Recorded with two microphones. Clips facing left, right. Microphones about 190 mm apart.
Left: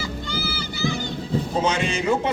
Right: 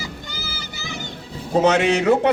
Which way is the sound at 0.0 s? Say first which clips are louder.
Left 5 dB; 20° right (ahead or behind).